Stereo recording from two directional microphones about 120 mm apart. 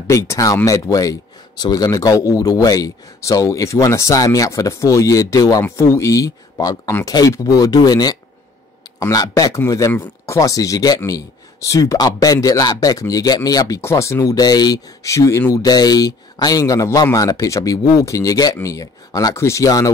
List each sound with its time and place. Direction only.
0.0 s speech: 25° left (ahead or behind)